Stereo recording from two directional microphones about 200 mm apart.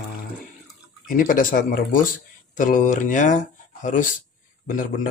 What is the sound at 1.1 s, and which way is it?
Speech, 45° left (ahead or behind).